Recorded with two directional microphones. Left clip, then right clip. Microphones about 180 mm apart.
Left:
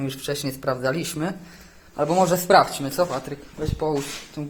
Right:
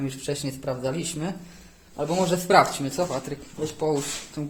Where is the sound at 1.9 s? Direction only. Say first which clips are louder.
Left 5 dB; 25° left (ahead or behind).